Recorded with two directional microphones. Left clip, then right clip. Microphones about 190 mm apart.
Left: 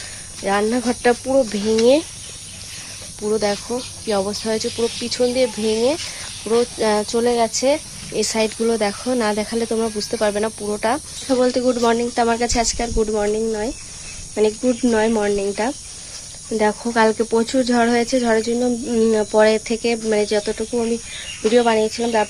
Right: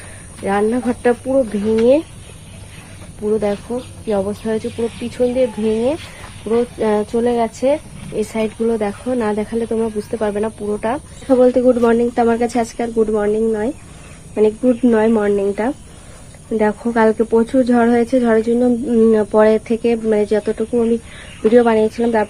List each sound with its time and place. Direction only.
0.4 s speech: 25° left (ahead or behind)
3.3 s speech: 50° left (ahead or behind)
8.3 s speech: 55° left (ahead or behind)
11.3 s speech: 10° left (ahead or behind)